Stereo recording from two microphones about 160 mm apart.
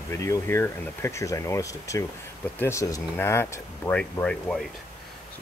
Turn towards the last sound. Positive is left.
turn(degrees=5)  # may be behind; listen again after turning